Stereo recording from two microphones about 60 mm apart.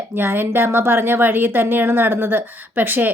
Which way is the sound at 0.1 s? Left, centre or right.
Right.